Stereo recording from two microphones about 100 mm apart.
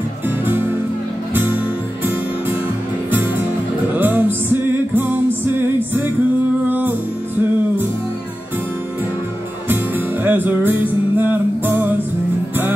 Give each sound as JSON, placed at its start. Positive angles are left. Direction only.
{"t": 1.3, "sound": "music", "side_deg": -20}
{"t": 3.9, "sound": "music", "side_deg": -20}
{"t": 9.7, "sound": "music", "side_deg": -20}